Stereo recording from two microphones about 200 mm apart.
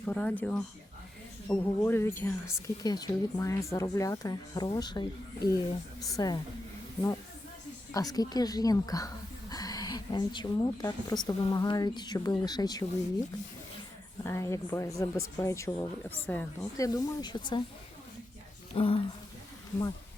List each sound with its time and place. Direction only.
0.0 s speech: 5° left (ahead or behind)
7.9 s speech: 20° left (ahead or behind)
14.3 s speech: 15° left (ahead or behind)
18.7 s speech: 25° left (ahead or behind)